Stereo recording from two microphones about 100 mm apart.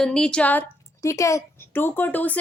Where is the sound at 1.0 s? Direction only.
30° left (ahead or behind).